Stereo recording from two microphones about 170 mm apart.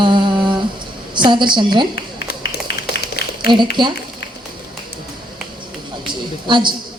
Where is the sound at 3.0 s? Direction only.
70° left (ahead or behind).